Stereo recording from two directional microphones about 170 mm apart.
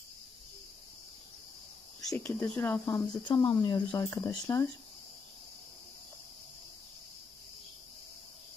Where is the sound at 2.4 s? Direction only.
10° left (ahead or behind).